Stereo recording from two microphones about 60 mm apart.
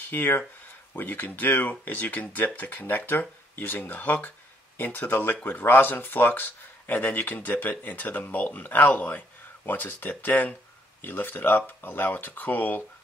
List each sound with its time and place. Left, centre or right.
0.1 s speech: left